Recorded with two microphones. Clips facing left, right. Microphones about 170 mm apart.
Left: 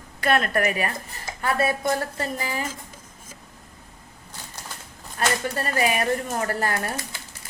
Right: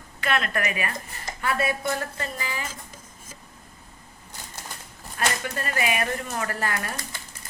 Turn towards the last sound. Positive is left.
turn(degrees=35)  # may be behind; listen again after turning